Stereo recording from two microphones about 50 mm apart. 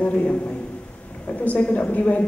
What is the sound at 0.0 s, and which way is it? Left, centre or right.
A man's voice, left.